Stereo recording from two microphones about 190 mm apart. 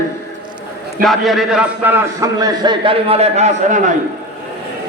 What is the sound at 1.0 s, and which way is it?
A man's voice, centre (ahead or behind).